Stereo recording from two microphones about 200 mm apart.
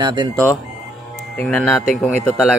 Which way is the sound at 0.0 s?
20° right (ahead or behind).